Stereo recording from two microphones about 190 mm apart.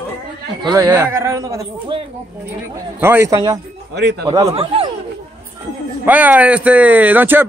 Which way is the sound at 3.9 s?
60° right (ahead or behind).